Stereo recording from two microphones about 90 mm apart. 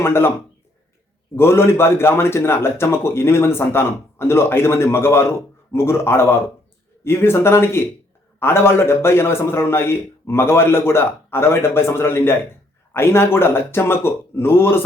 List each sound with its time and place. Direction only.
0.0 s a man's voice: 25° left (ahead or behind)
1.4 s a man's voice: 30° left (ahead or behind)